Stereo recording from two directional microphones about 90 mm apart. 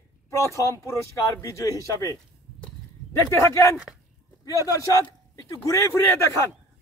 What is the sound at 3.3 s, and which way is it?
Speech, 30° left (ahead or behind).